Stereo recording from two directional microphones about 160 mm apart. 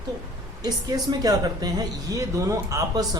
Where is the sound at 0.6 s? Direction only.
25° right (ahead or behind).